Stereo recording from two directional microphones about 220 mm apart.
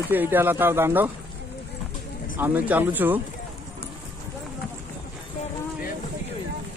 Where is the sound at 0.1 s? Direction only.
10° right (ahead or behind).